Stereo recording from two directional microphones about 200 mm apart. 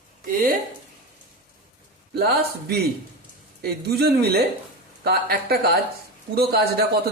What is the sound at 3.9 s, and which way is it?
Speech, 55° right (ahead or behind).